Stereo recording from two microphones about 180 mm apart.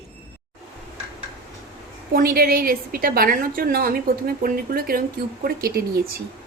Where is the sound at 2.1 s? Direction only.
55° right (ahead or behind).